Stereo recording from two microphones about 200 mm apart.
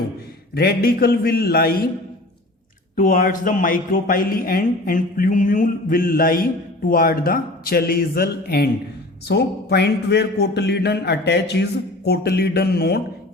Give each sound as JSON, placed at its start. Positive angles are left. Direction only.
{"t": 0.5, "sound": "a man's voice", "side_deg": 50}
{"t": 2.9, "sound": "a man's voice", "side_deg": 40}